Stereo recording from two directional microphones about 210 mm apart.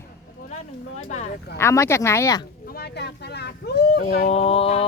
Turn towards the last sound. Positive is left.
turn(degrees=30)  # may be behind; listen again after turning